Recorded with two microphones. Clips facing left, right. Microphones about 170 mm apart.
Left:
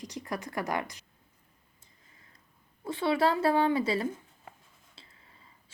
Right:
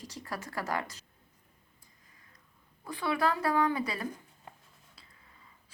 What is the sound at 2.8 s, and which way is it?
Speech, 25° left (ahead or behind).